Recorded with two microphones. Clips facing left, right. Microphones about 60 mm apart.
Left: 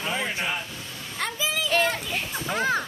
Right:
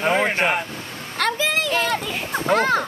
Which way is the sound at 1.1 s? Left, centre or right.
Right.